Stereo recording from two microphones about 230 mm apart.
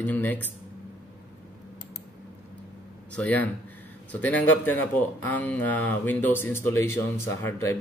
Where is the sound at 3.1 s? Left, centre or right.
Centre.